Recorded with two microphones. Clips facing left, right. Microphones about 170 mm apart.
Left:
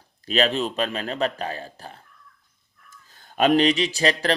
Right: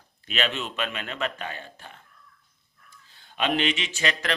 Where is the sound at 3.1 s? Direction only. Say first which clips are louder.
Left 8 dB; 45° left (ahead or behind).